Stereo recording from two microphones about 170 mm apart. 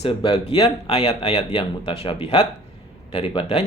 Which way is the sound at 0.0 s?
30° left (ahead or behind).